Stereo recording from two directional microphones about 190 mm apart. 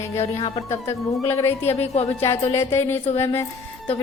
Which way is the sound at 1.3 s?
15° left (ahead or behind).